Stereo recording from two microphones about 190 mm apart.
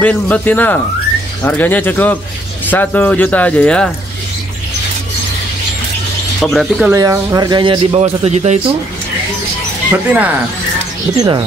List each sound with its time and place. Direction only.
0.0 s speech: 10° left (ahead or behind)
6.4 s speech: centre (ahead or behind)
6.9 s a man's voice: 15° right (ahead or behind); by 8.5 s 35° right (ahead or behind)
9.8 s speech: 10° right (ahead or behind)
11.1 s a man's voice: 20° right (ahead or behind)